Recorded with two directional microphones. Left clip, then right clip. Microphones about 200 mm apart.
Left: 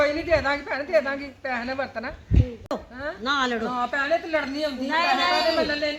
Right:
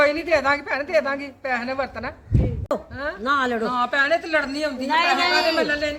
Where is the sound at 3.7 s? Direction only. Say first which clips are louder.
Right 4 dB; 15° right (ahead or behind).